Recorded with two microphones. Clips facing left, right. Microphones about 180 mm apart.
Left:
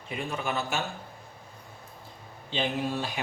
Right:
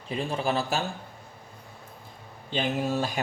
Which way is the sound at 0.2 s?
30° right (ahead or behind).